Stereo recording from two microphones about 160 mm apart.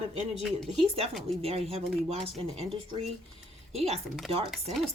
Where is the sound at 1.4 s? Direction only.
40° right (ahead or behind).